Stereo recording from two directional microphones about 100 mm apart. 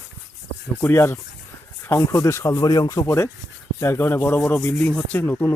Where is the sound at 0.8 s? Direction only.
25° left (ahead or behind).